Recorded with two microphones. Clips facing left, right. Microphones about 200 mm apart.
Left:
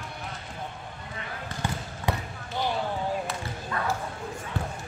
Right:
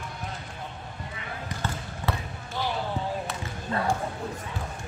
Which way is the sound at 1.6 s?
15° left (ahead or behind).